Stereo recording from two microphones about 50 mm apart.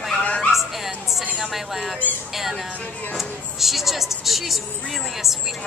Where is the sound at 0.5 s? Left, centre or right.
Centre.